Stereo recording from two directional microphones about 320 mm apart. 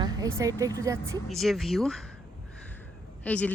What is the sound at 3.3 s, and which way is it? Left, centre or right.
Speech, centre.